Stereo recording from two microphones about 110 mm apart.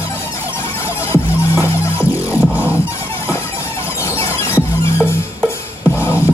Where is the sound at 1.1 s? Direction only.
25° left (ahead or behind).